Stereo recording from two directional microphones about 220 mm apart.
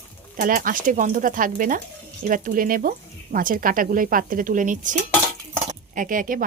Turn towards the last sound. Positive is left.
turn(degrees=-40)  # may be behind; listen again after turning